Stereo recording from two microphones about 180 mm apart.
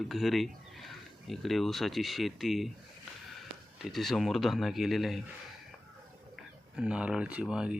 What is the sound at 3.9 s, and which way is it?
Speech, centre (ahead or behind).